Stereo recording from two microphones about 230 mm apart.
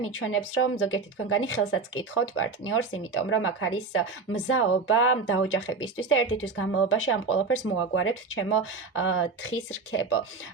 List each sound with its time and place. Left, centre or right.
0.0 s speech: left